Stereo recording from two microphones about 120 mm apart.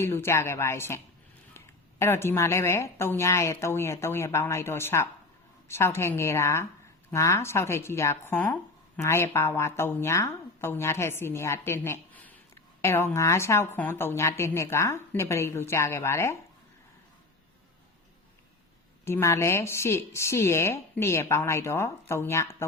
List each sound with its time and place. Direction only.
0.0 s a woman's voice: 20° left (ahead or behind)
19.0 s a woman's voice: 20° left (ahead or behind)